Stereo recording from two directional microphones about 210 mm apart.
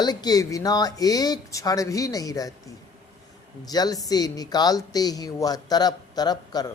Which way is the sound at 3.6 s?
20° left (ahead or behind).